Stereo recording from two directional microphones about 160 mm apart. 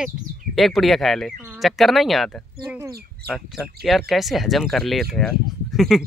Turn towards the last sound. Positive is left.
turn(degrees=0)  # may be behind; listen again after turning